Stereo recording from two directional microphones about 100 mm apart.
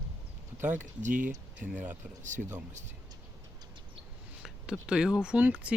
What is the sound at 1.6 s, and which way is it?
Speech, 15° right (ahead or behind).